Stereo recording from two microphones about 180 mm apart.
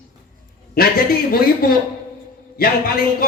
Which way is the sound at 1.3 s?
55° left (ahead or behind).